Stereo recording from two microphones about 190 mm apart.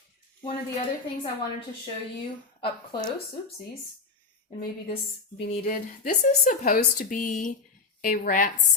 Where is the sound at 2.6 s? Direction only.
25° left (ahead or behind).